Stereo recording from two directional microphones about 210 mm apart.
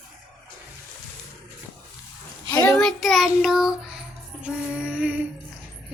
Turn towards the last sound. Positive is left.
turn(degrees=-5)  # may be behind; listen again after turning